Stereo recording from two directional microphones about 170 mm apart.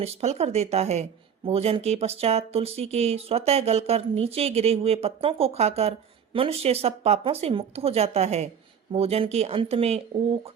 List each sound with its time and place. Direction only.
0.0 s speech: 40° right (ahead or behind)